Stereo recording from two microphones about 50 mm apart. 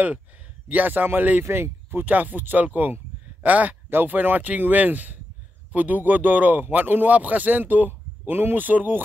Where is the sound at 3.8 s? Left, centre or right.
Right.